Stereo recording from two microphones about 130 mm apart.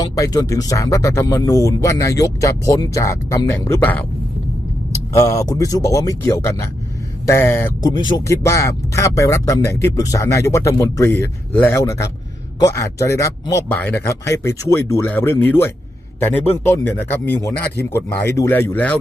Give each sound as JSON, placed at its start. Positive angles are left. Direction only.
{"t": 0.0, "sound": "speech", "side_deg": 25}
{"t": 5.1, "sound": "speech", "side_deg": 25}
{"t": 7.8, "sound": "speech", "side_deg": 30}